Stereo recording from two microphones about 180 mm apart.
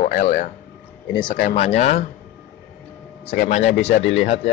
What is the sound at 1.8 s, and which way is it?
Speech, 40° left (ahead or behind).